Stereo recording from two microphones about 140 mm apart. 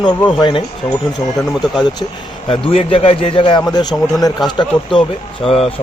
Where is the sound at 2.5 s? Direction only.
40° left (ahead or behind).